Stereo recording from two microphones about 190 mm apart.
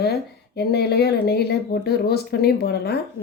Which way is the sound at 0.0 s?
55° left (ahead or behind).